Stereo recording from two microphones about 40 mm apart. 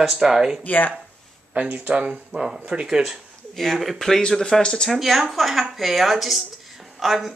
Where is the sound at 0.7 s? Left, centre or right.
Left.